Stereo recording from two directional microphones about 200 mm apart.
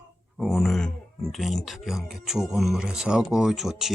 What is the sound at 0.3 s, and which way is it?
Speech, centre (ahead or behind).